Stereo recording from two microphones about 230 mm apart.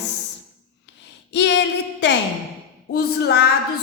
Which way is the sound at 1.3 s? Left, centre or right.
Left.